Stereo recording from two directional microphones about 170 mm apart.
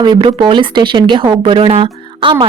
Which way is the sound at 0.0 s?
25° right (ahead or behind).